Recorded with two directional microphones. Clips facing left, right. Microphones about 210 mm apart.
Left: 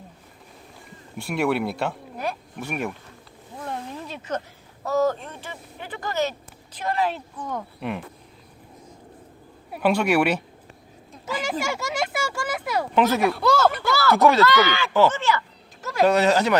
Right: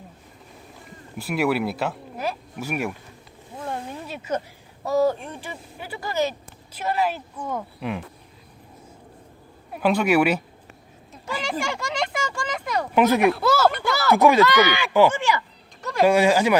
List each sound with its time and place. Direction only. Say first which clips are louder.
1.2 s speech: right 1 dB; centre (ahead or behind)
9.7 s speech: right 1 dB; centre (ahead or behind)
11.6 s speech: even; 5° left (ahead or behind)
12.9 s speech: right 3 dB; 10° right (ahead or behind)
13.9 s speech: right 1 dB; 15° right (ahead or behind)
15.8 s a sound: even; centre (ahead or behind)
16.0 s speech: right 1 dB; 10° right (ahead or behind)